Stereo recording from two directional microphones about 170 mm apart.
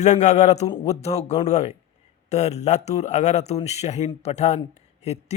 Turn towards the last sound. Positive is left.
turn(degrees=40)  # may be behind; listen again after turning